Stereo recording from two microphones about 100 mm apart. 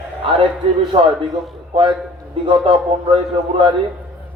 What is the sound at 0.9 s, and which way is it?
Speech, 90° right.